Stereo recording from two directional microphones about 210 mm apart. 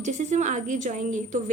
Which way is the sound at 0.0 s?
35° right (ahead or behind).